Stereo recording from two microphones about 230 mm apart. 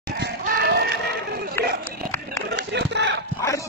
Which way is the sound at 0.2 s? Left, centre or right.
Right.